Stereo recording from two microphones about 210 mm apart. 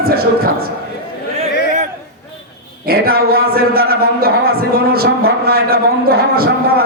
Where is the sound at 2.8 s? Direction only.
45° right (ahead or behind).